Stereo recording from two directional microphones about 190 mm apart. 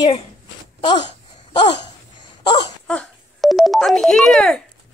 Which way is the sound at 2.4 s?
25° left (ahead or behind).